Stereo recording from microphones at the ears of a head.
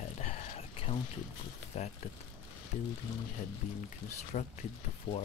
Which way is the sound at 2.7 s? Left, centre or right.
Left.